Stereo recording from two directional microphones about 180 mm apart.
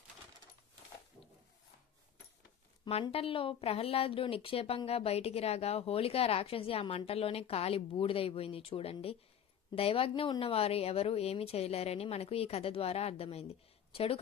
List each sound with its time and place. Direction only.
2.8 s speech: 30° left (ahead or behind)